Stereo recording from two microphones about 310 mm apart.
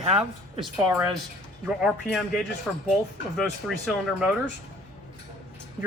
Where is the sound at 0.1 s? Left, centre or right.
Centre.